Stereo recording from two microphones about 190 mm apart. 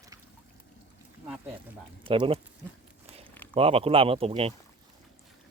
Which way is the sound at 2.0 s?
30° right (ahead or behind).